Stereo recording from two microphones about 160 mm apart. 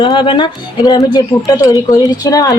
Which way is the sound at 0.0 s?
30° left (ahead or behind).